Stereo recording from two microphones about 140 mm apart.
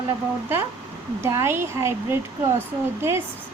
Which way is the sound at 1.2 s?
20° right (ahead or behind).